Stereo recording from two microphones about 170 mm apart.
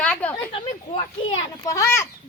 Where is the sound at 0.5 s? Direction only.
35° left (ahead or behind).